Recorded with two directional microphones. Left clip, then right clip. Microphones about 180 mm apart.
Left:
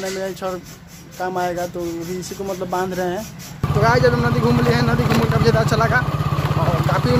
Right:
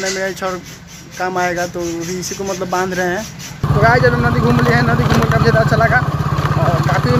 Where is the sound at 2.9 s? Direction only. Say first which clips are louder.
Right 5 dB; 5° right (ahead or behind).